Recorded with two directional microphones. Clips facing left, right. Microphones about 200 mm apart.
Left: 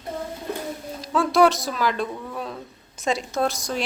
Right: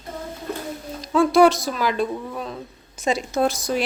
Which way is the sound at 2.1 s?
10° right (ahead or behind).